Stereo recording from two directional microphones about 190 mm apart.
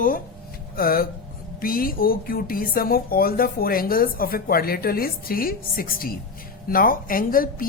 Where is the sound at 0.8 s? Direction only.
50° left (ahead or behind).